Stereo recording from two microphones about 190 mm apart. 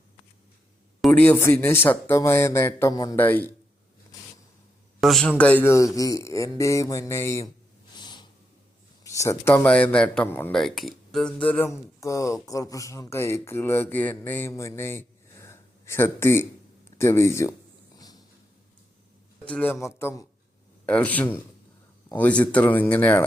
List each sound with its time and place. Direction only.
1.0 s speech: 5° left (ahead or behind)
4.9 s speech: centre (ahead or behind)
7.9 s snort: 25° left (ahead or behind)
9.0 s speech: 15° left (ahead or behind)
17.9 s a sound: 20° left (ahead or behind)
19.5 s speech: 10° left (ahead or behind)